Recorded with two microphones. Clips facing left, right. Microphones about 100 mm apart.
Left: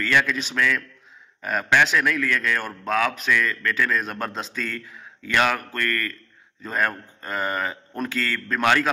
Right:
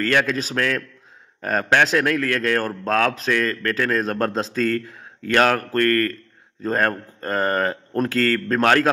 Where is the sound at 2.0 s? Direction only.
55° right (ahead or behind).